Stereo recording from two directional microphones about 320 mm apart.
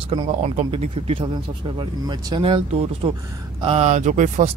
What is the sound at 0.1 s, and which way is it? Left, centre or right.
Speech, right.